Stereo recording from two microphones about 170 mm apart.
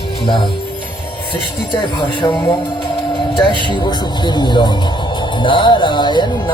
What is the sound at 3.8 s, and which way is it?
Music, 25° left (ahead or behind).